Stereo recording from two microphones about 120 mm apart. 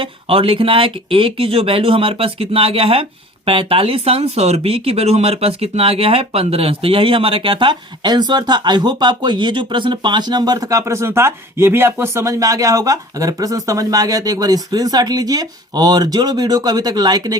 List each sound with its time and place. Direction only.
0.0 s speech: 50° right (ahead or behind); by 17.3 s 35° right (ahead or behind)